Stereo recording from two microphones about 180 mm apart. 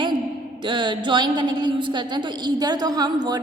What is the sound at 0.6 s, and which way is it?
A woman's voice, 25° right (ahead or behind).